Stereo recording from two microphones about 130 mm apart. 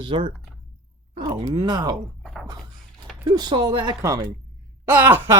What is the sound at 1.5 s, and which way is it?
Speech, 30° right (ahead or behind).